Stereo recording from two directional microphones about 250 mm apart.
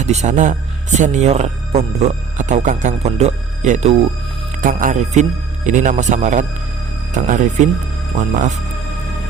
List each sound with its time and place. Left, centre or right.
0.0 s speech: right